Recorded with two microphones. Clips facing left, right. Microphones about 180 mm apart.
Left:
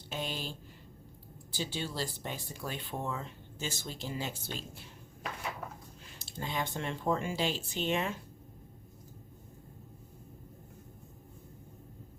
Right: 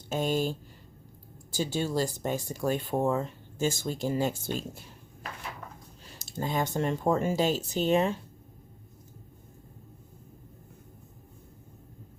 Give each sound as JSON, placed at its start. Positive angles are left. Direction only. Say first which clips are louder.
{"t": 0.1, "sound": "speech", "louder": "right 11 dB", "side_deg": -45}
{"t": 6.1, "sound": "speech", "louder": "right 7 dB", "side_deg": -40}